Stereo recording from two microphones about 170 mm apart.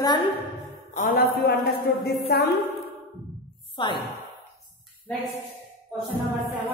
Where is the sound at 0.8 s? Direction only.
55° left (ahead or behind).